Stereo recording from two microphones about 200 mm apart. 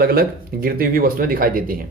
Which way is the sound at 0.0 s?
50° right (ahead or behind).